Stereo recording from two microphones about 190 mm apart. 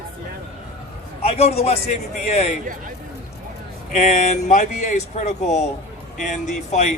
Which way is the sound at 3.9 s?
40° left (ahead or behind).